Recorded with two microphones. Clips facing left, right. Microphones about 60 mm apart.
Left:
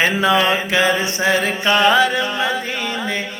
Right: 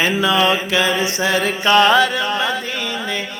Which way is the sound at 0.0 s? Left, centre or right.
Left.